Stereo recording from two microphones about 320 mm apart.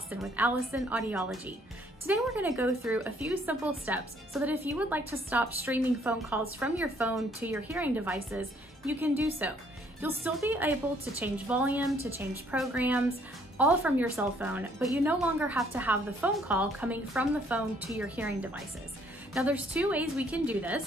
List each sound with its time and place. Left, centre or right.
0.1 s speech: centre